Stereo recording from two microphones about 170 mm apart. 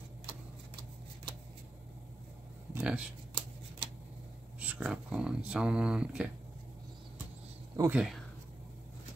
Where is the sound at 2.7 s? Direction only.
5° right (ahead or behind).